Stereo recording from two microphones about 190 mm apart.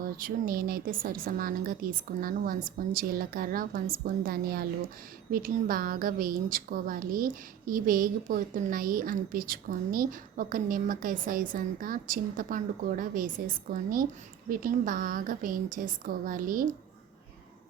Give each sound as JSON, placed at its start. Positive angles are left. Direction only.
{"t": 0.2, "sound": "a woman's voice", "side_deg": -50}